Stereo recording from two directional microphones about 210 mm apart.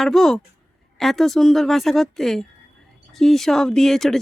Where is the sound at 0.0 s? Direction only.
Centre (ahead or behind).